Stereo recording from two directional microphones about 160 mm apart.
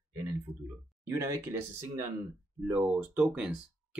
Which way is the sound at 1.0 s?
15° right (ahead or behind).